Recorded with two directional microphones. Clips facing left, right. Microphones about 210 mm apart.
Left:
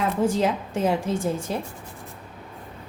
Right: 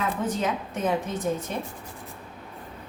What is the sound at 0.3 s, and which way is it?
A woman's voice, 30° left (ahead or behind).